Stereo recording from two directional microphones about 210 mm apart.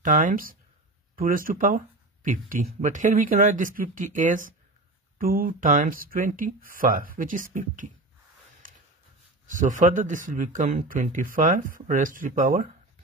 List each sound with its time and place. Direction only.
0.0 s speech: 40° right (ahead or behind)
8.6 s a sound: 40° right (ahead or behind)
9.5 s speech: 40° right (ahead or behind)